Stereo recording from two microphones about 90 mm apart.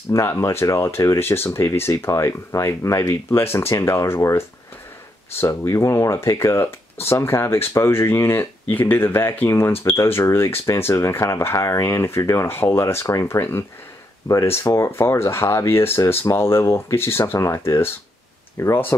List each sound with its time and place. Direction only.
0.1 s speech: 30° left (ahead or behind)